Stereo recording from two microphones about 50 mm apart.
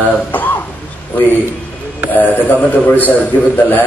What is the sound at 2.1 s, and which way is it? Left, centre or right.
A man's voice, left.